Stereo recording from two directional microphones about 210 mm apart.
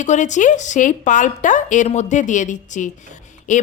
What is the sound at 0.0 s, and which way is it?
A woman's voice, 35° left (ahead or behind).